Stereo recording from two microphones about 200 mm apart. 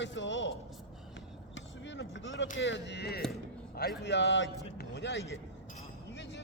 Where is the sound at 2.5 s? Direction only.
65° left (ahead or behind).